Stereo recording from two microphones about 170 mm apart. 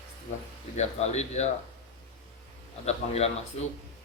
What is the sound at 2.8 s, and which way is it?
Speech, 40° left (ahead or behind).